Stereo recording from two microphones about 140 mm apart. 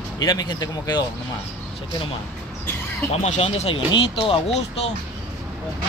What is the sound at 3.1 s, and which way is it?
Speech, 50° left (ahead or behind).